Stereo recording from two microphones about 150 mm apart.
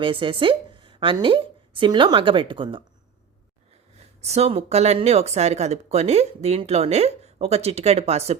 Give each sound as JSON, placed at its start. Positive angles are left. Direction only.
{"t": 0.0, "sound": "a woman's voice", "side_deg": -35}
{"t": 4.2, "sound": "speech", "side_deg": -45}